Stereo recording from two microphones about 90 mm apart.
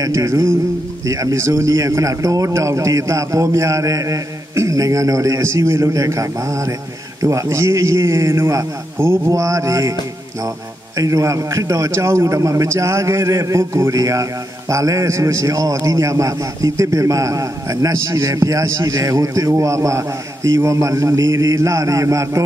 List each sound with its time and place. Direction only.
0.0 s a man's voice: 35° right (ahead or behind)
8.9 s a man's voice: 25° right (ahead or behind)
11.0 s a man's voice: 40° right (ahead or behind)